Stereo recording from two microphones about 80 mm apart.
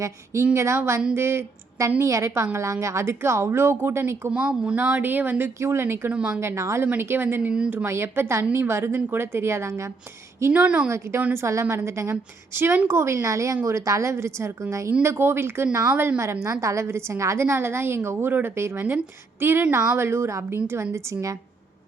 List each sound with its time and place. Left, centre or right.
0.5 s a woman's voice: right
4.3 s speech: centre
4.8 s speech: right
5.5 s a woman's voice: right
6.1 s speech: centre
6.4 s a woman's voice: right
10.5 s speech: centre
10.8 s a woman's voice: right